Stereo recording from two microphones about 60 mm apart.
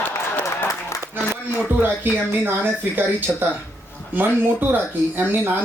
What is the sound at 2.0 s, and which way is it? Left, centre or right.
Speech, right.